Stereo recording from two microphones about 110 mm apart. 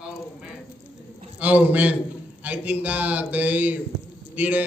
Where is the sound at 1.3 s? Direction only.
15° right (ahead or behind).